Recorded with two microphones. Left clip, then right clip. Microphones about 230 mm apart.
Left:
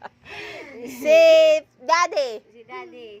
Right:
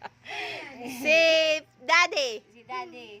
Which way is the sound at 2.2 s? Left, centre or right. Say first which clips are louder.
Left 4 dB; right.